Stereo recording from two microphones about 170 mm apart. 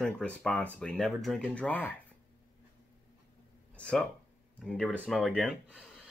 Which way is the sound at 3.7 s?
5° left (ahead or behind).